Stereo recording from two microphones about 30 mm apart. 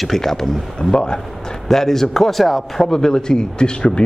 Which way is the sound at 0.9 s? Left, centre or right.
Left.